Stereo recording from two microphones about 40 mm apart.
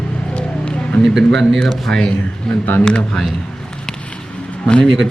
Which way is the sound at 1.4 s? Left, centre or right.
Centre.